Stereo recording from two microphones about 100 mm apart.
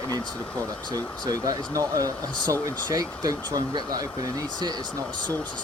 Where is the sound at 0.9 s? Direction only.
40° right (ahead or behind).